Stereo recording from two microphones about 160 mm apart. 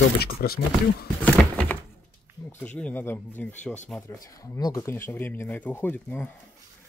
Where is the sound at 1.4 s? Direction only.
5° left (ahead or behind).